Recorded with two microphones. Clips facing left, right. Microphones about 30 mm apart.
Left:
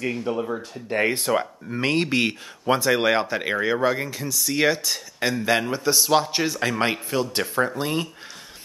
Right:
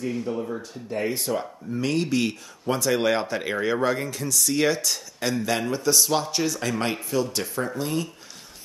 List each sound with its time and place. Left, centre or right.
0.0 s speech: left